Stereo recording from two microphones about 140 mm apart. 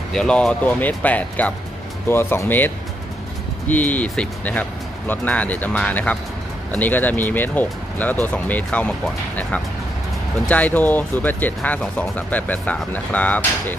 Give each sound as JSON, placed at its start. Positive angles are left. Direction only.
{"t": 0.1, "sound": "speech", "side_deg": 5}